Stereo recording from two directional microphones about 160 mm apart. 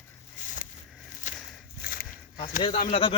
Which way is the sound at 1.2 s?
50° left (ahead or behind).